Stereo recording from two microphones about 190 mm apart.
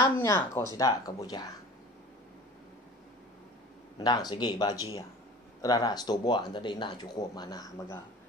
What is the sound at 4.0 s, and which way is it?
Speech, 20° left (ahead or behind).